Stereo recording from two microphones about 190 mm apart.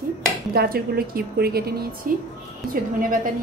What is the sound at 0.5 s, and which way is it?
A woman's voice, 50° right (ahead or behind).